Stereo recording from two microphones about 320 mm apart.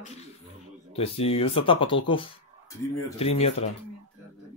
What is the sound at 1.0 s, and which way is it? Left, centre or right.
Speech, centre.